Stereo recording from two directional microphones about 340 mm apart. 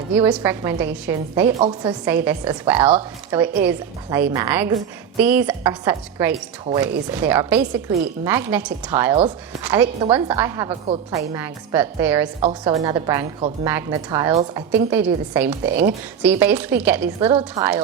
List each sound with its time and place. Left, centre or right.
0.3 s a woman's voice: centre
17.2 s a woman's voice: centre